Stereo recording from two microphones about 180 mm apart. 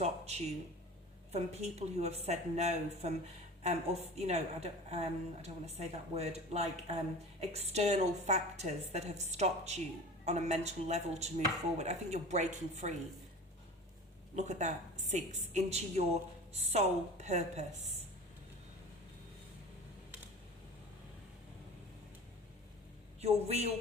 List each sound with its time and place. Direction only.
0.0 s speech: 35° right (ahead or behind)
14.3 s speech: 40° right (ahead or behind)
23.2 s speech: 35° right (ahead or behind)